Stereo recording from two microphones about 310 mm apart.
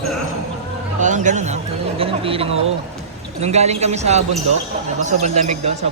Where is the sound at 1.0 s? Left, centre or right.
Right.